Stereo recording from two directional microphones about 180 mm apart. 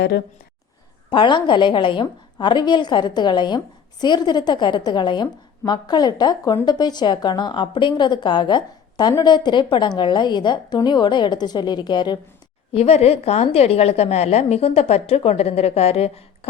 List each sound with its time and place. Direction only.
1.1 s a woman's voice: 25° left (ahead or behind)
12.7 s a woman's voice: 35° left (ahead or behind)